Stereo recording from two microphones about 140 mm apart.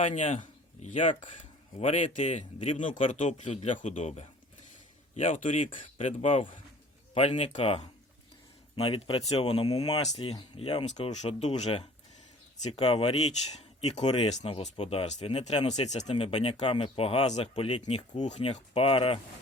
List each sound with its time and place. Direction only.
0.2 s speech: 55° left (ahead or behind)
1.8 s speech: 50° left (ahead or behind)
6.0 s speech: 45° left (ahead or behind)